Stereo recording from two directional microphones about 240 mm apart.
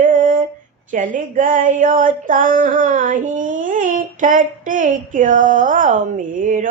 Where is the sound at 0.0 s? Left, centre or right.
Right.